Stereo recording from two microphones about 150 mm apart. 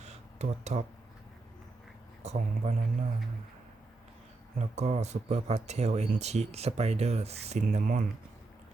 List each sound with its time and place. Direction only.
0.0 s a sound: 50° right (ahead or behind)
2.2 s speech: 45° right (ahead or behind)
4.5 s speech: 50° right (ahead or behind)